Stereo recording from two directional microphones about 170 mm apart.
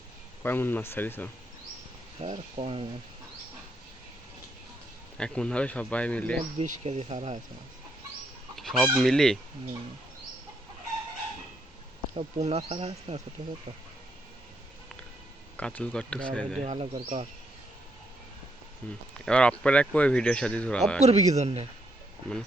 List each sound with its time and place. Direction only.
0.4 s speech: 10° left (ahead or behind)
2.2 s speech: 35° right (ahead or behind)
5.1 s speech: 5° left (ahead or behind)
6.6 s speech: 40° right (ahead or behind)
8.5 s chicken: centre (ahead or behind)
12.1 s speech: 40° right (ahead or behind)
15.5 s speech: 5° left (ahead or behind)
16.6 s speech: 30° right (ahead or behind)
18.8 s speech: 10° left (ahead or behind)
21.0 s speech: 40° right (ahead or behind)